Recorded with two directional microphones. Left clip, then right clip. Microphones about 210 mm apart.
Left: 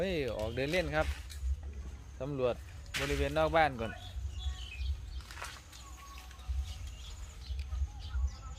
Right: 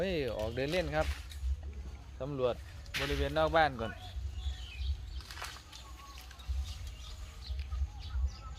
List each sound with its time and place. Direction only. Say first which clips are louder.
0.0 s speech: even; centre (ahead or behind)
2.1 s speech: even; 10° left (ahead or behind)
5.3 s whip: right 1 dB; 35° right (ahead or behind)